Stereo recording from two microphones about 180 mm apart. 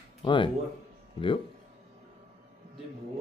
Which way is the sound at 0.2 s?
25° left (ahead or behind).